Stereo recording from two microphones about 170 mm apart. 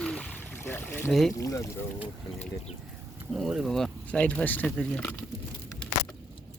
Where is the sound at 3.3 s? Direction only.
Centre (ahead or behind).